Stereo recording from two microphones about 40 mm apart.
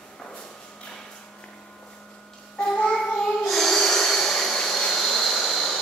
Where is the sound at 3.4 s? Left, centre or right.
Centre.